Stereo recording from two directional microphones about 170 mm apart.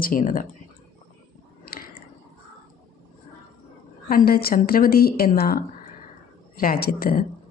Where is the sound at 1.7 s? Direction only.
65° left (ahead or behind).